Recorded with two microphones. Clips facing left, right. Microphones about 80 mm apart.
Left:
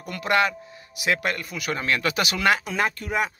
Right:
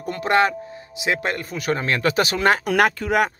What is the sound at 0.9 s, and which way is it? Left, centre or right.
Speech, right.